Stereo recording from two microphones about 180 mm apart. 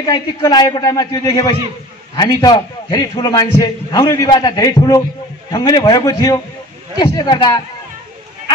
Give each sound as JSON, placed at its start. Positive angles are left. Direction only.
{"t": 0.0, "sound": "a man's voice", "side_deg": 20}